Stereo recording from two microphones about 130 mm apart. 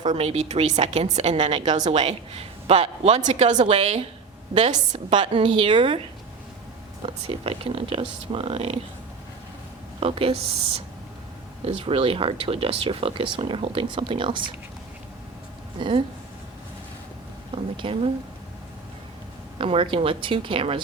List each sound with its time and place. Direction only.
0.1 s a woman's voice: 55° right (ahead or behind)
1.4 s speech: 45° right (ahead or behind)
1.6 s a woman's voice: 60° right (ahead or behind)
3.6 s a woman's voice: 50° right (ahead or behind)
7.0 s speech: 45° right (ahead or behind)
10.0 s speech: 45° right (ahead or behind)
11.6 s speech: 45° right (ahead or behind)
15.8 s a woman's voice: 40° right (ahead or behind)
17.5 s speech: 45° right (ahead or behind)
19.5 s a woman's voice: 45° right (ahead or behind)